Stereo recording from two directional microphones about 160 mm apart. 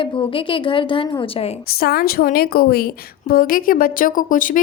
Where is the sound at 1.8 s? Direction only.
70° left (ahead or behind).